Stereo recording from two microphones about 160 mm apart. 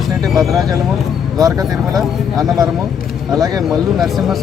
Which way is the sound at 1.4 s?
20° right (ahead or behind).